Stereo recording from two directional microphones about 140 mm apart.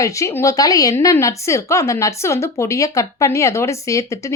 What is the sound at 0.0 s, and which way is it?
A woman's voice, 20° left (ahead or behind).